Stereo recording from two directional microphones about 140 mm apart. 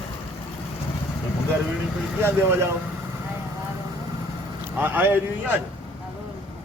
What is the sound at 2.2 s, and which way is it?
Speech, 20° right (ahead or behind).